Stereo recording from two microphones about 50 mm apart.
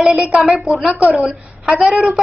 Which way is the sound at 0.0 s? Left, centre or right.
Centre.